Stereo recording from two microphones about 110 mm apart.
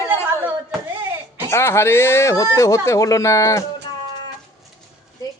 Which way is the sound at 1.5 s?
25° left (ahead or behind).